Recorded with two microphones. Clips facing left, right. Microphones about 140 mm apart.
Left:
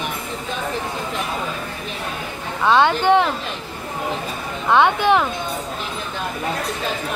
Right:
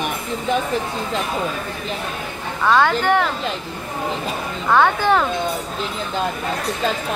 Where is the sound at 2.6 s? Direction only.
20° left (ahead or behind).